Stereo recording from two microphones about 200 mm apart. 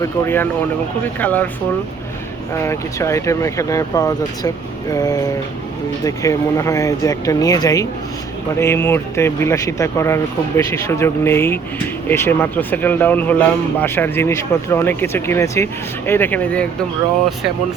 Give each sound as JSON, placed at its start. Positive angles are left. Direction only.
{"t": 0.0, "sound": "speech", "side_deg": 10}
{"t": 2.5, "sound": "speech", "side_deg": 15}